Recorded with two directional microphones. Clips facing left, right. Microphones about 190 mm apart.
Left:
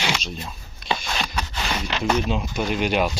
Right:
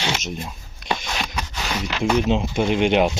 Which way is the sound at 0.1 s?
20° right (ahead or behind).